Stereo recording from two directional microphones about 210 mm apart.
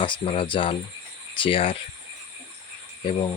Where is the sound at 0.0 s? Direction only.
25° left (ahead or behind).